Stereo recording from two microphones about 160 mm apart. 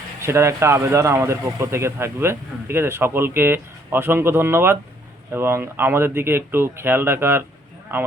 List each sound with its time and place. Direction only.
0.2 s speech: 15° right (ahead or behind)